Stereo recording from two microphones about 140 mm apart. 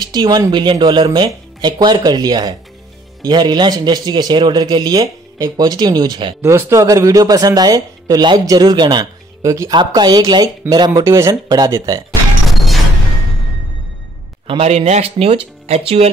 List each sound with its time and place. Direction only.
0.0 s a man's voice: 30° right (ahead or behind)
6.4 s speech: 20° right (ahead or behind)
12.4 s music: centre (ahead or behind)
14.6 s speech: 50° right (ahead or behind)